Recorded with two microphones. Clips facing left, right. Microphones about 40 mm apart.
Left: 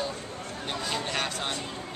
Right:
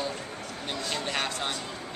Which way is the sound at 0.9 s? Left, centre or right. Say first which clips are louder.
Right 1 dB; centre.